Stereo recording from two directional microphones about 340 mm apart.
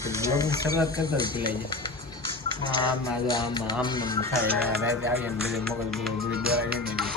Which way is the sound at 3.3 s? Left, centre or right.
Centre.